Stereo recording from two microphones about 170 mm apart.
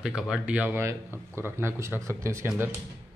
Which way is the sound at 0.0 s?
5° right (ahead or behind).